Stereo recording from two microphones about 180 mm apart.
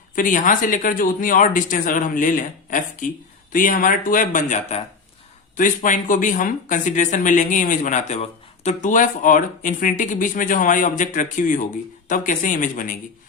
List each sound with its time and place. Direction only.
0.2 s speech: 45° left (ahead or behind)